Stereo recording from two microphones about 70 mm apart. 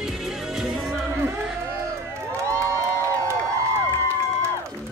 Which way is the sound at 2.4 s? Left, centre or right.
Right.